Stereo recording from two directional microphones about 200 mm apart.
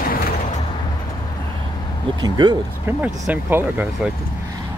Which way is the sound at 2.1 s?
20° right (ahead or behind).